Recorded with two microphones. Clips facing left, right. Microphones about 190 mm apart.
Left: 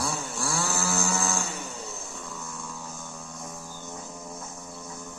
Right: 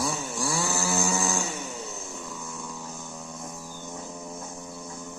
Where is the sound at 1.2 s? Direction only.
Centre (ahead or behind).